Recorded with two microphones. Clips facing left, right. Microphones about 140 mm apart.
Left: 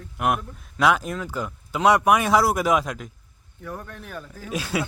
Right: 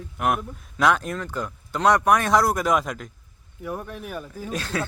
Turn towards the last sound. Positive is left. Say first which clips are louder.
# left 1 dB
turn(degrees=10)  # may be behind; listen again after turning